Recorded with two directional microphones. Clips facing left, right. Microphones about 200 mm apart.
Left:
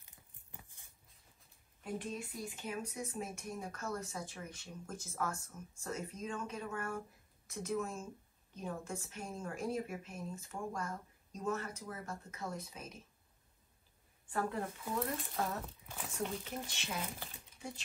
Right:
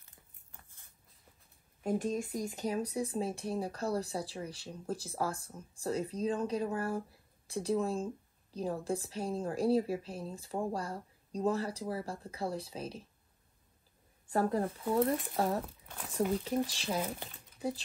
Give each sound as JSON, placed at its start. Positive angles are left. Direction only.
{"t": 0.0, "sound": "a sound", "side_deg": 15}
{"t": 1.8, "sound": "a woman's voice", "side_deg": -45}
{"t": 14.3, "sound": "a woman's voice", "side_deg": -35}
{"t": 15.9, "sound": "speech", "side_deg": 0}
{"t": 16.4, "sound": "a woman's voice", "side_deg": -35}